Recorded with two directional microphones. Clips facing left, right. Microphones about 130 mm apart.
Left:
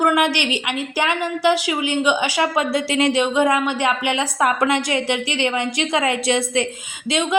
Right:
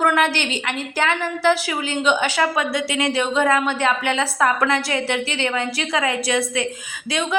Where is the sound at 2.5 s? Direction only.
30° left (ahead or behind).